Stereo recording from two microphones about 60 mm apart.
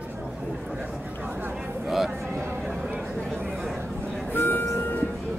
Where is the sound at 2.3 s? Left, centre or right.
Right.